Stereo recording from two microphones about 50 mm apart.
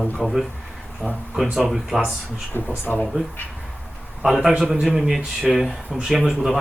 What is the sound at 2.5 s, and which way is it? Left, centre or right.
Speech, left.